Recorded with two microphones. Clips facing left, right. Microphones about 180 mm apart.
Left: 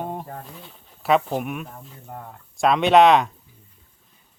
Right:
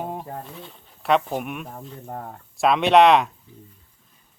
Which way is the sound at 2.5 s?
Centre (ahead or behind).